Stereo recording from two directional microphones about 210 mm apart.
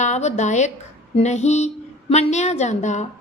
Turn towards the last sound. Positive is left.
turn(degrees=35)  # may be behind; listen again after turning